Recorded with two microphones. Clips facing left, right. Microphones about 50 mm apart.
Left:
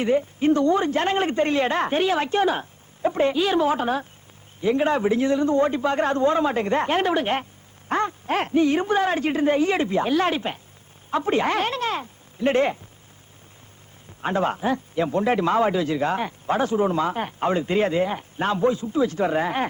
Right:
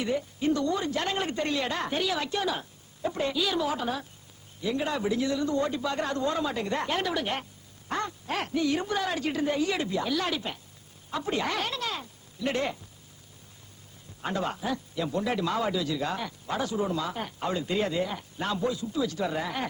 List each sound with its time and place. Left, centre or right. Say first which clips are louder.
0.0 s a man's voice: left 8 dB; left
14.2 s a man's voice: left 7 dB; left